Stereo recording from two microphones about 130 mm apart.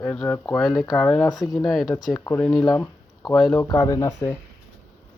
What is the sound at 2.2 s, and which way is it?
Speech, 20° left (ahead or behind).